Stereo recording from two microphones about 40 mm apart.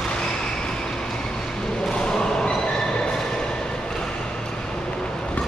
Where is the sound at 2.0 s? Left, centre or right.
Centre.